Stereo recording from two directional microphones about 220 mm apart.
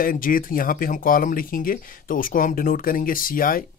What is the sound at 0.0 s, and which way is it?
Speech, 40° left (ahead or behind).